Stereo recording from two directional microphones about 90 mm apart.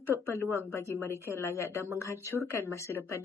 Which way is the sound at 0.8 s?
30° left (ahead or behind).